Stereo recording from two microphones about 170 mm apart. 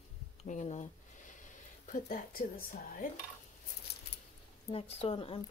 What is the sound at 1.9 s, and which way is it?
Speech, 60° left (ahead or behind).